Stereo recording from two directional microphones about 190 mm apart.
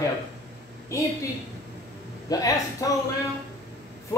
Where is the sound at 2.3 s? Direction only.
20° left (ahead or behind).